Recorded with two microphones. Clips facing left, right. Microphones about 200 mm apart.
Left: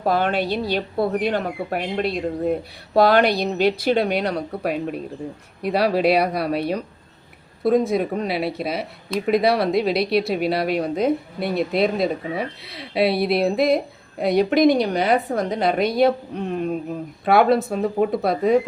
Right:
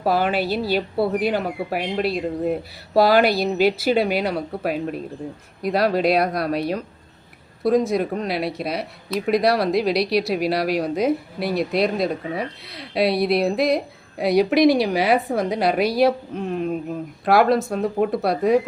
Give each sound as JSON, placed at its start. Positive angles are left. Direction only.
{"t": 0.0, "sound": "speech", "side_deg": -5}